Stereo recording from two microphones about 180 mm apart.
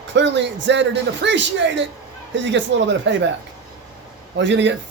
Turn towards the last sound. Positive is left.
turn(degrees=-80)